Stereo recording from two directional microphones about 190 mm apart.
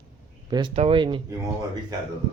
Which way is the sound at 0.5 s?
30° right (ahead or behind).